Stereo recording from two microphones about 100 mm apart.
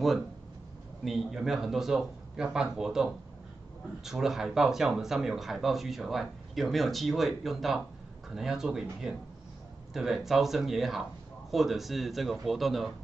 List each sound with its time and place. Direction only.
1.0 s speech: centre (ahead or behind)